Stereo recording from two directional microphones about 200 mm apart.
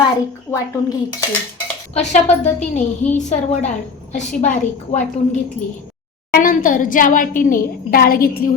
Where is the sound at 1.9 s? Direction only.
35° left (ahead or behind).